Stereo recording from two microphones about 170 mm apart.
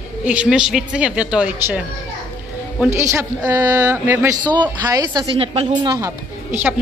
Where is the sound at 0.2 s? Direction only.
5° right (ahead or behind).